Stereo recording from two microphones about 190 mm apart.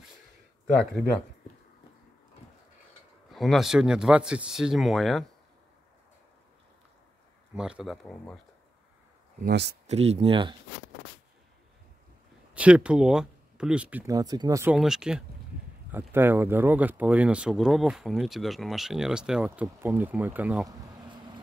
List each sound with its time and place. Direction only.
3.3 s speech: centre (ahead or behind)
7.5 s speech: 5° right (ahead or behind)
9.4 s speech: 55° right (ahead or behind)
9.8 s speech: 35° right (ahead or behind)
12.5 s speech: 5° right (ahead or behind)
14.1 s speech: 20° right (ahead or behind)
14.8 s speech: 5° right (ahead or behind)